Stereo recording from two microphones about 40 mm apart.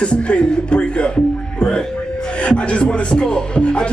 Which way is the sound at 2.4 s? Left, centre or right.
Left.